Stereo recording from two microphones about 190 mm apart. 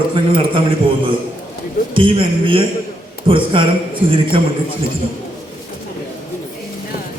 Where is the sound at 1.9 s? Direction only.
25° right (ahead or behind).